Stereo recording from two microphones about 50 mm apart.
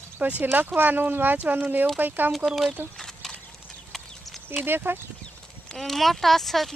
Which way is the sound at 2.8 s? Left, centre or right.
Right.